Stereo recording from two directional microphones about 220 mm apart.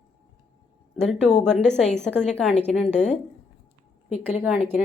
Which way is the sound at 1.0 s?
Centre (ahead or behind).